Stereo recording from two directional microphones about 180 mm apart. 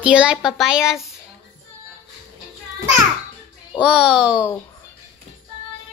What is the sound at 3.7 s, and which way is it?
Speech, 5° right (ahead or behind).